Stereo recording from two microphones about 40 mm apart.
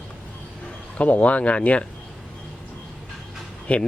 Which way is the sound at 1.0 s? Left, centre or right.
Left.